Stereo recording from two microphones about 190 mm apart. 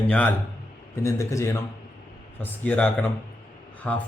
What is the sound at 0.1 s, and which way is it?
A man's voice, 5° left (ahead or behind).